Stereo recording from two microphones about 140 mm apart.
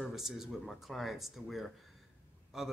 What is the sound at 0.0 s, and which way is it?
Speech, centre (ahead or behind).